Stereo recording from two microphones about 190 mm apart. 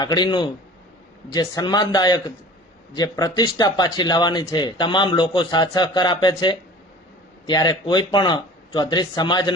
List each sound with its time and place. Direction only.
0.0 s speech: 25° left (ahead or behind)